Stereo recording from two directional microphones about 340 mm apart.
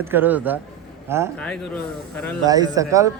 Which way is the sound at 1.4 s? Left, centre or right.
Centre.